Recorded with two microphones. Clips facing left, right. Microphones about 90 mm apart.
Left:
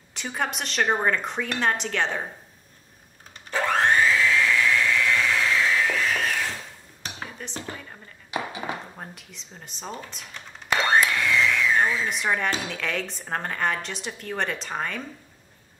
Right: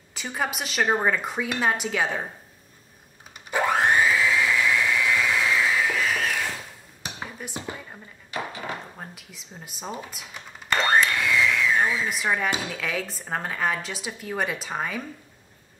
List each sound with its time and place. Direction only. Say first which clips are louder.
0.1 s a woman's voice: even; centre (ahead or behind)
3.4 s blender: even; 15° right (ahead or behind)
7.0 s a sound: right 1 dB; 5° right (ahead or behind)
8.3 s a sound: left 2 dB; 15° left (ahead or behind)
8.9 s a woman's voice: even; centre (ahead or behind)
10.7 s speech: even; 5° left (ahead or behind)